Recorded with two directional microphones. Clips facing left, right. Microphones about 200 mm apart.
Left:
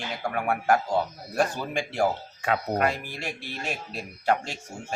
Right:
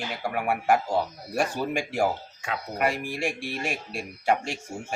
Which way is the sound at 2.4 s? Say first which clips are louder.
Left 6 dB; 55° left (ahead or behind).